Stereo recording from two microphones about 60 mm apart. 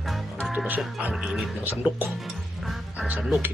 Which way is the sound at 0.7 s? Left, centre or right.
Right.